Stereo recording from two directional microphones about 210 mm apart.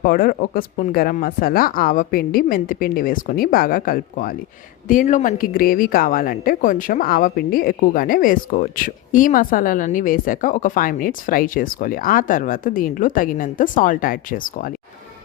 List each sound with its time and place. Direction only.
0.0 s speech: 45° left (ahead or behind)